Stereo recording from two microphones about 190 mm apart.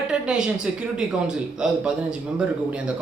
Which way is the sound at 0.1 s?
5° right (ahead or behind).